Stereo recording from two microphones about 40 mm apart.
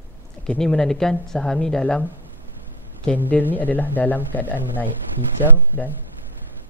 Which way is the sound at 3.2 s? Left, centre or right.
Left.